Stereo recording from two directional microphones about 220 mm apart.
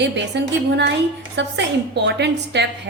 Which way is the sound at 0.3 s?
50° right (ahead or behind).